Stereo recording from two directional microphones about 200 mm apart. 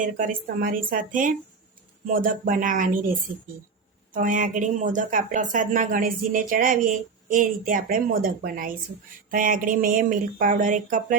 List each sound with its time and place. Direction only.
0.0 s a woman's voice: 40° right (ahead or behind)
4.1 s speech: 40° right (ahead or behind)